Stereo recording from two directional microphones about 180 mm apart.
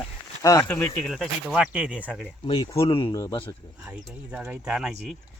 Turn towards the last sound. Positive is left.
turn(degrees=0)  # may be behind; listen again after turning